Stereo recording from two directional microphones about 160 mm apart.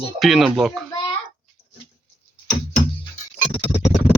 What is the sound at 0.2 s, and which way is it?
Speech, centre (ahead or behind).